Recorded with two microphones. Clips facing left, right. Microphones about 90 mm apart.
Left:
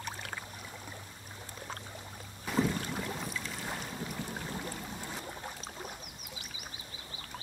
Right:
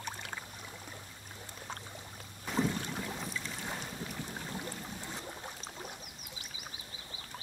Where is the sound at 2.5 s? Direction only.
5° left (ahead or behind).